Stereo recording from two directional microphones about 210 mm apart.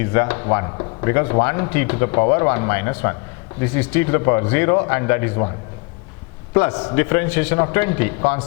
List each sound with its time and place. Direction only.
0.0 s speech: 15° left (ahead or behind)
6.5 s speech: 20° left (ahead or behind)